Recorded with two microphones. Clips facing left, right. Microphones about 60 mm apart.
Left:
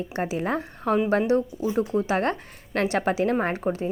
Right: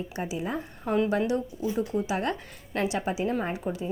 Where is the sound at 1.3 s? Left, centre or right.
Left.